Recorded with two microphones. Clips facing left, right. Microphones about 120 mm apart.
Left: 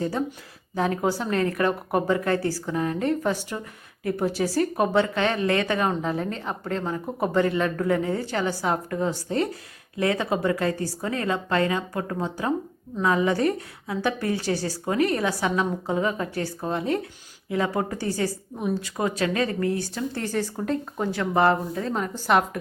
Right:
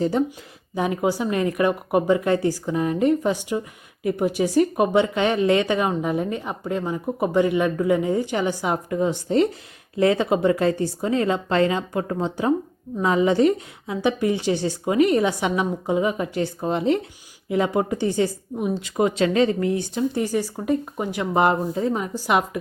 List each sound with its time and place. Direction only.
0.8 s a woman's voice: 15° right (ahead or behind)